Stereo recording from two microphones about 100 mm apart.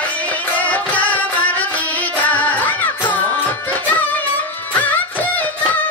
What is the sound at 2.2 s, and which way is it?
Music, 15° left (ahead or behind).